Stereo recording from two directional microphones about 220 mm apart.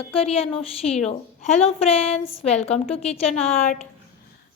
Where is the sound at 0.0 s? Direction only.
25° left (ahead or behind).